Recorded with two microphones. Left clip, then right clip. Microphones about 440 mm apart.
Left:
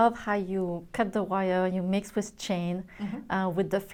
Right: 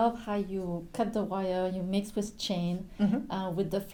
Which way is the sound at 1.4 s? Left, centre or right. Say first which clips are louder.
Left 4 dB; left.